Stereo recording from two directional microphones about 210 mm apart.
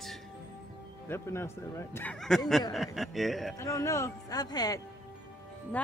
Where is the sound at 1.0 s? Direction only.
10° left (ahead or behind).